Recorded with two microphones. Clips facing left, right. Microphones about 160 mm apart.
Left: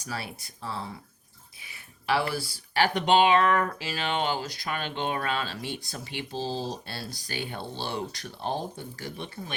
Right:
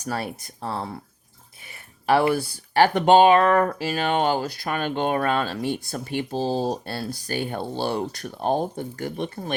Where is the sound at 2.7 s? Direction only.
45° right (ahead or behind).